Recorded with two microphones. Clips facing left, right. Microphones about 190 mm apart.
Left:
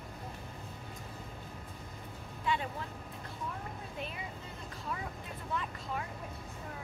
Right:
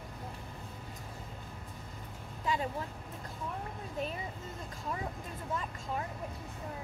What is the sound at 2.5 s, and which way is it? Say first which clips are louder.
Vehicle: even; 40° right (ahead or behind).